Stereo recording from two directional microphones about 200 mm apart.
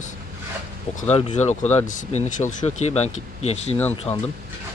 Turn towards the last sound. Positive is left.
turn(degrees=30)  # may be behind; listen again after turning